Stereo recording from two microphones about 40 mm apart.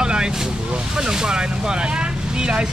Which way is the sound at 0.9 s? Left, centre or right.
Centre.